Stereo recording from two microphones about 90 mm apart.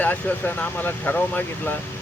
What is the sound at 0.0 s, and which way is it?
Speech, 20° left (ahead or behind).